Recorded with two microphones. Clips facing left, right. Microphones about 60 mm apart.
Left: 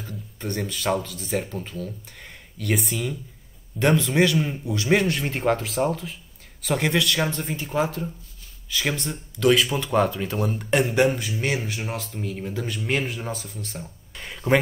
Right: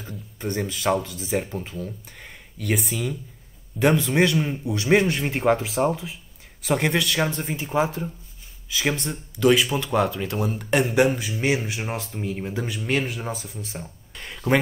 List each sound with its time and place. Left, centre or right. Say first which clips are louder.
0.0 s speech: right 2 dB; centre
2.6 s speech: even; centre; by 5.2 s right
5.2 s speech: right 2 dB; centre; by 12.5 s right
12.5 s speech: right 1 dB; centre
13.3 s speech: right 1 dB; centre
14.1 s a sound: left 1 dB; centre